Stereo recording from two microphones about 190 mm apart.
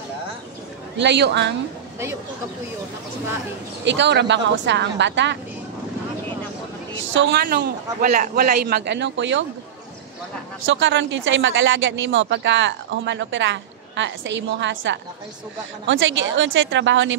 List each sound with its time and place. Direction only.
0.9 s speech: 65° right (ahead or behind)
3.8 s speech: 70° right (ahead or behind)
7.2 s speech: 75° right (ahead or behind)
7.4 s a man's voice: 45° right (ahead or behind); by 9.4 s 70° right (ahead or behind)
10.6 s speech: 75° right (ahead or behind)